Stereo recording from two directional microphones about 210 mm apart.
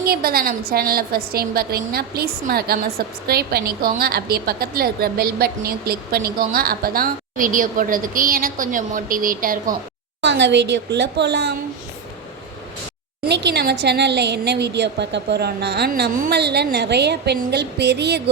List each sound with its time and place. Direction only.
0.0 s a woman's voice: 45° right (ahead or behind)
10.2 s a woman's voice: 55° right (ahead or behind)
13.2 s a woman's voice: 55° right (ahead or behind)